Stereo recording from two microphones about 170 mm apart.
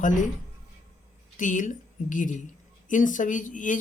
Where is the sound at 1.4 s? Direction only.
50° left (ahead or behind).